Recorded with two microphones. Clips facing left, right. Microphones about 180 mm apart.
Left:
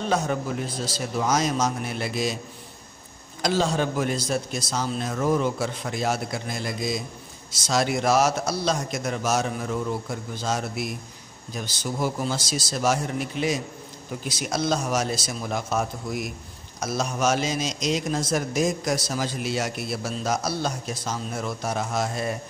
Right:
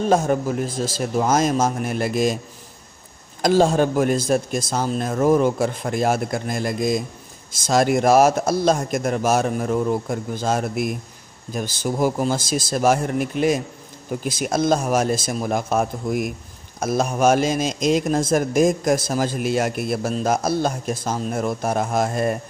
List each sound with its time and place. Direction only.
0.0 s a man's voice: 45° right (ahead or behind)
3.4 s a man's voice: 50° right (ahead or behind)